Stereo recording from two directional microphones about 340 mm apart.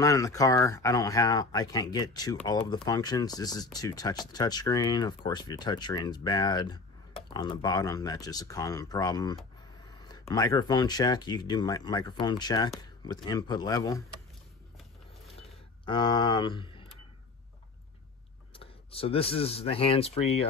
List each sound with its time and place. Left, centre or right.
0.0 s speech: centre
15.3 s a sound: centre
18.5 s speech: centre